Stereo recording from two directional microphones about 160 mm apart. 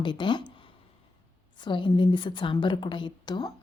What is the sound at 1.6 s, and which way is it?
A woman's voice, 30° left (ahead or behind).